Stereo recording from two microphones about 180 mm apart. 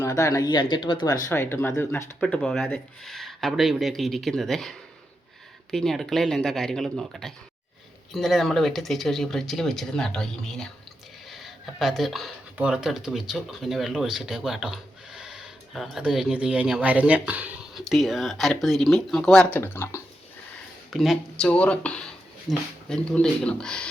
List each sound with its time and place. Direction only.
0.0 s speech: 15° left (ahead or behind); by 4.7 s centre (ahead or behind)
5.7 s speech: centre (ahead or behind)
20.9 s speech: centre (ahead or behind)